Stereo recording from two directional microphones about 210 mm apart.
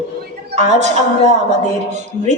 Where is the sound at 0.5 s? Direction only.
35° right (ahead or behind).